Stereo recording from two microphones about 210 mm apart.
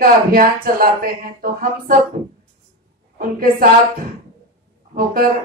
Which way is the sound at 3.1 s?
45° right (ahead or behind).